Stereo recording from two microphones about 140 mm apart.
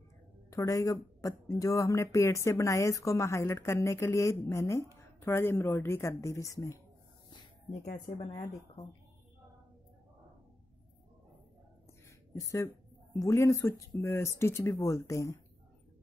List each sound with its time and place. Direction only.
0.5 s speech: 25° left (ahead or behind)
12.4 s speech: 25° left (ahead or behind)